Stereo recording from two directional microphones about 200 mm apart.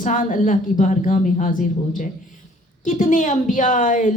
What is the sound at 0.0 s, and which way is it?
A woman's voice, 40° left (ahead or behind).